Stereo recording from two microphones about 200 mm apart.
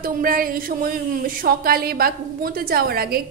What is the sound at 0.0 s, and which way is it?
A woman's voice, 45° right (ahead or behind).